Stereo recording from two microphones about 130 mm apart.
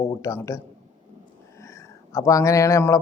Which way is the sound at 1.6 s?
20° left (ahead or behind).